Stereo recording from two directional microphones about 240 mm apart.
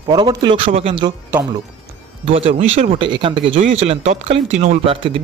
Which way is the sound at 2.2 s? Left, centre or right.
Right.